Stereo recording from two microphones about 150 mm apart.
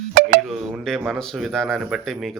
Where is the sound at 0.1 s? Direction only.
65° right (ahead or behind).